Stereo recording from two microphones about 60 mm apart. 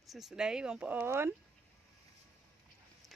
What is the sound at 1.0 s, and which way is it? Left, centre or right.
Speech, right.